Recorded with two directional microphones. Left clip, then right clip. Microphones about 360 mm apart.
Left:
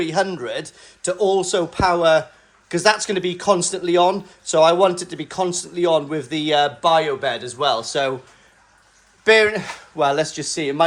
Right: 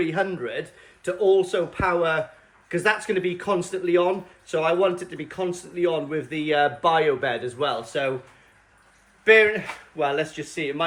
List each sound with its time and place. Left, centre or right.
0.0 s speech: centre
9.2 s speech: centre
10.0 s speech: left
10.2 s speech: centre
10.5 s speech: left